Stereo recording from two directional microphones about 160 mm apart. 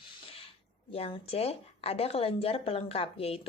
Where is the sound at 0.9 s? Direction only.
40° left (ahead or behind).